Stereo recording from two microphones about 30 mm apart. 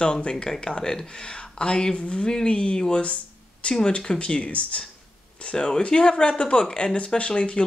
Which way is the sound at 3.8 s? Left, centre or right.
Left.